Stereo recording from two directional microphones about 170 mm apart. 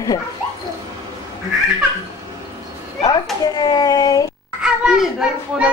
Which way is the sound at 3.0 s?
20° left (ahead or behind).